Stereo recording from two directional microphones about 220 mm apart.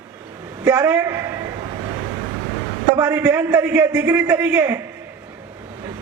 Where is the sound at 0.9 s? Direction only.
10° right (ahead or behind).